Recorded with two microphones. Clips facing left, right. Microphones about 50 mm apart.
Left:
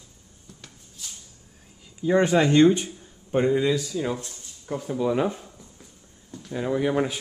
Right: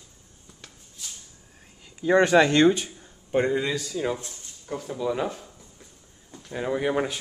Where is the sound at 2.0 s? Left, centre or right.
Right.